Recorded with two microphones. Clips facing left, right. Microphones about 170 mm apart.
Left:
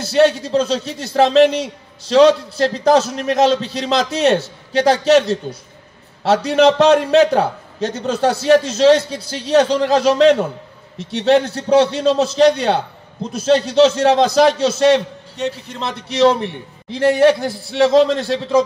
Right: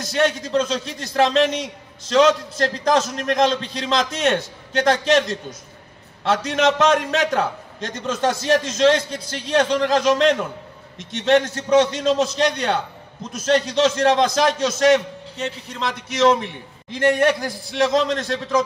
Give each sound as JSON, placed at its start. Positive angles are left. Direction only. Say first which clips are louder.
{"t": 0.0, "sound": "a man's voice", "louder": "left 7 dB", "side_deg": 30}